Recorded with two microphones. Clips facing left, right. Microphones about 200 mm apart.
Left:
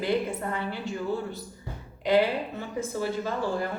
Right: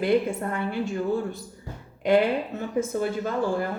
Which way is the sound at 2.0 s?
50° right (ahead or behind).